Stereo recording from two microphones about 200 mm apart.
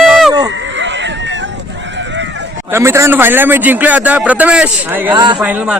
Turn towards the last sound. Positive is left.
turn(degrees=-5)  # may be behind; listen again after turning